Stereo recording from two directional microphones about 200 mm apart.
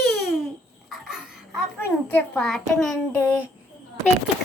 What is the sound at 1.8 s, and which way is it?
A child's voice, 10° left (ahead or behind).